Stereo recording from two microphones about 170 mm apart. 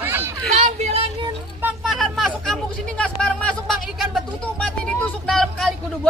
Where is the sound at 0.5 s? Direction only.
40° right (ahead or behind).